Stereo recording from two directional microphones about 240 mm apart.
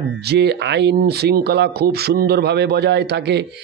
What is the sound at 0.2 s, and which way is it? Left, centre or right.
Speech, right.